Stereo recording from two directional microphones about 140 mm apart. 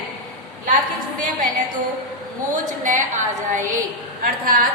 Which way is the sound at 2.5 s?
65° right (ahead or behind).